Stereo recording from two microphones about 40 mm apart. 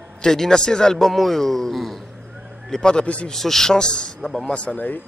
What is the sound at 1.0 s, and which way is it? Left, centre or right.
A man's voice, centre.